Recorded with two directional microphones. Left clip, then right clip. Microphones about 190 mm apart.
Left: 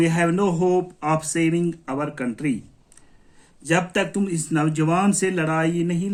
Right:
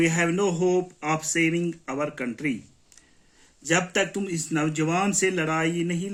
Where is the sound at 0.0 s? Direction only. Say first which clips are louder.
Left 3 dB; 55° left (ahead or behind).